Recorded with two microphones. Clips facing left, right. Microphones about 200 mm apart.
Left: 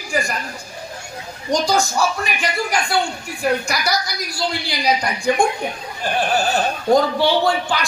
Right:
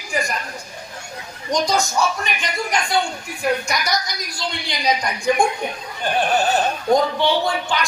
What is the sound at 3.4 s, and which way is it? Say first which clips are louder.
A woman's voice: left 1 dB; 30° left (ahead or behind).